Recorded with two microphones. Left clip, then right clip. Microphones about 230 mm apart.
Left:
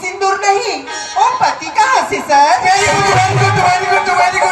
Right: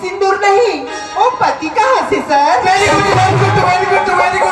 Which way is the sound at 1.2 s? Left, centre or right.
Left.